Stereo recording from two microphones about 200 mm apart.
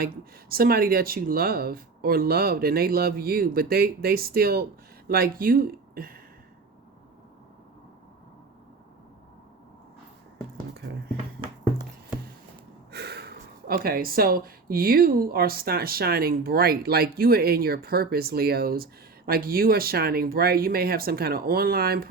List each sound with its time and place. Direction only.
0.0 s speech: 50° right (ahead or behind)
12.9 s speech: 55° right (ahead or behind)